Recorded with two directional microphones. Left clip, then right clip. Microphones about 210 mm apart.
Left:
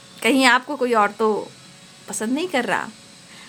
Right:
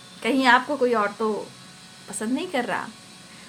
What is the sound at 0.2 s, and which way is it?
A woman's voice, 35° left (ahead or behind).